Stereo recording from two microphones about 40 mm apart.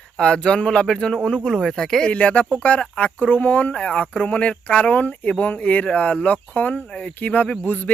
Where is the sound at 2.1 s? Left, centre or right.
Left.